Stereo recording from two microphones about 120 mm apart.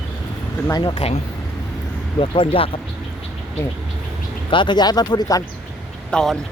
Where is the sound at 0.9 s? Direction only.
65° left (ahead or behind).